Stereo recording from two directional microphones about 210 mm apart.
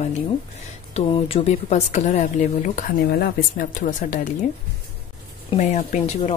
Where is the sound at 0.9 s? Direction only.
30° left (ahead or behind).